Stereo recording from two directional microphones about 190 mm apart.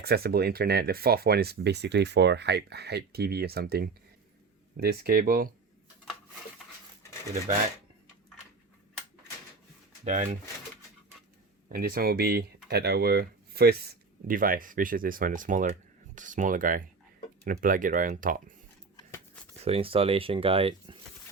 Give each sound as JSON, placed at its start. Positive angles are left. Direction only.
{"t": 0.0, "sound": "speech", "side_deg": -55}
{"t": 10.0, "sound": "speech", "side_deg": -40}
{"t": 11.7, "sound": "speech", "side_deg": -50}
{"t": 19.6, "sound": "speech", "side_deg": -30}